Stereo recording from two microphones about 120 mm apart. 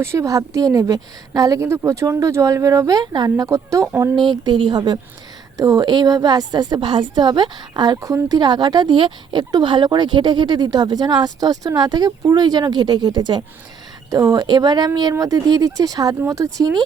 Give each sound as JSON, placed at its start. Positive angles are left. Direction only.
{"t": 0.0, "sound": "a woman's voice", "side_deg": -25}
{"t": 4.3, "sound": "a woman's voice", "side_deg": -40}